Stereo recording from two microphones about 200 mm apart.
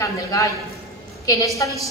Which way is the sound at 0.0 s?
15° left (ahead or behind).